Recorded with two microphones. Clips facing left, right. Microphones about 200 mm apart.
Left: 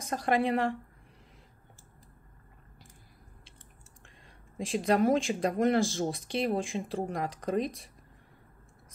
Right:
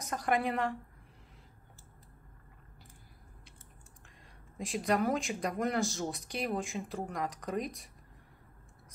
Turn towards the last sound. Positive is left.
turn(degrees=30)  # may be behind; listen again after turning